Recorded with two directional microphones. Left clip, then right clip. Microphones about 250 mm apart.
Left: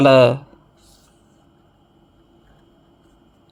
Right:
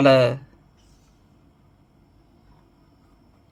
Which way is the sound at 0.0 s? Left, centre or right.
Centre.